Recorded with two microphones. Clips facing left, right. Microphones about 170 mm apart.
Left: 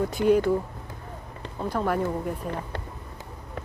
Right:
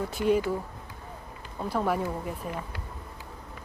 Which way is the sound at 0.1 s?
Centre (ahead or behind).